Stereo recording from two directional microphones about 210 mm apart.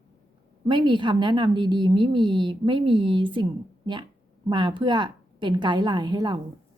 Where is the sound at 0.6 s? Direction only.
20° right (ahead or behind).